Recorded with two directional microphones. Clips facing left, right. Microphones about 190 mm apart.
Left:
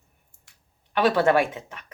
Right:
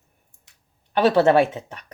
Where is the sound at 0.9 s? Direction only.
25° right (ahead or behind).